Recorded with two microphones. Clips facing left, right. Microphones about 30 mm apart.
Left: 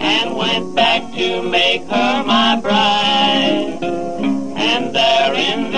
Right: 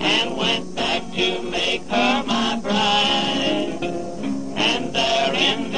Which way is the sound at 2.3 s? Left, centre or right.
Left.